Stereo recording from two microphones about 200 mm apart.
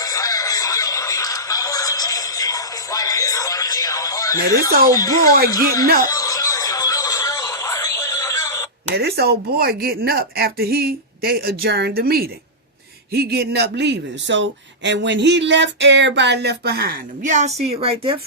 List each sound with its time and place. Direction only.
0.0 s music: 15° left (ahead or behind)
4.9 s speech: 15° left (ahead or behind)
6.1 s a sound: 15° left (ahead or behind)
9.0 s a woman's voice: 55° right (ahead or behind); by 18.2 s 30° right (ahead or behind)